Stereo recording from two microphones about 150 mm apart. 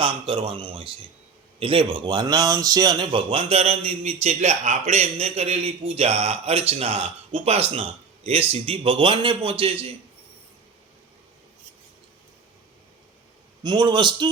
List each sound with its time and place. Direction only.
0.0 s speech: 35° right (ahead or behind)
13.6 s speech: 30° right (ahead or behind)